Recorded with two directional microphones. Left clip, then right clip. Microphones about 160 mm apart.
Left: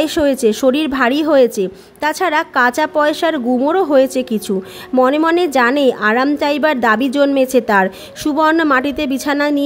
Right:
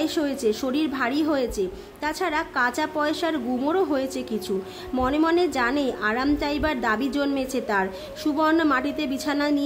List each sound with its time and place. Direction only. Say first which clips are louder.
0.0 s a woman's voice: left 10 dB; 50° left (ahead or behind)